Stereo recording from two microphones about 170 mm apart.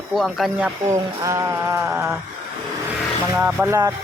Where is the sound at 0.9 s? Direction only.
20° right (ahead or behind).